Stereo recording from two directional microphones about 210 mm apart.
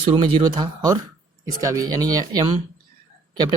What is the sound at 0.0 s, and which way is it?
Speech, 25° right (ahead or behind).